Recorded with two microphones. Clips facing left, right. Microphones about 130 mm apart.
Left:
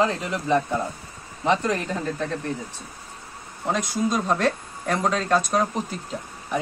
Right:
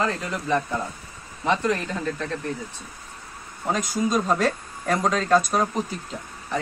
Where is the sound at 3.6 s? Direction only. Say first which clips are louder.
Even; centre (ahead or behind).